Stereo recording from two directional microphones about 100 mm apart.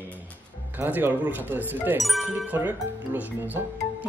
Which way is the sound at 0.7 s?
20° right (ahead or behind).